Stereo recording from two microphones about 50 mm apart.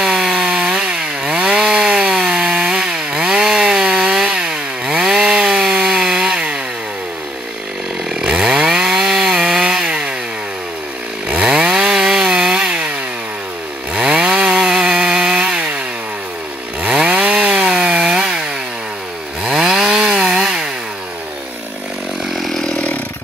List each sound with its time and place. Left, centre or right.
0.0 s chainsaw: centre
8.1 s chainsaw: centre
11.4 s chainsaw: centre
13.9 s chainsaw: centre
16.8 s chainsaw: centre
22.3 s chainsaw: centre